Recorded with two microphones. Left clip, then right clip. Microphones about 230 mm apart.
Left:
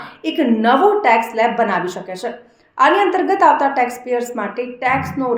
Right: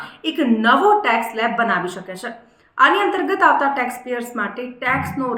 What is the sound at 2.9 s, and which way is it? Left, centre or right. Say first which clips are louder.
A woman's voice: left 6 dB; centre.